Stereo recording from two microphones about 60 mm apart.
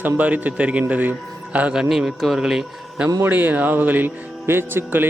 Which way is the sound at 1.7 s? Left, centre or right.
Centre.